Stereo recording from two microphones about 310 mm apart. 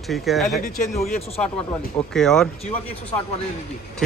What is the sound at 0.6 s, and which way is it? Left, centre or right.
Speech, left.